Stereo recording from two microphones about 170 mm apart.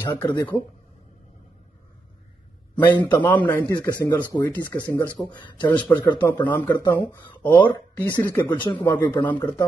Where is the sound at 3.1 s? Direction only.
10° left (ahead or behind).